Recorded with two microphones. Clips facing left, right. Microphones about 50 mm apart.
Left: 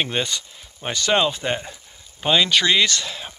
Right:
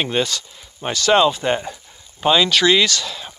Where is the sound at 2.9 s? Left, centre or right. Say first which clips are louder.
Right 2 dB; left.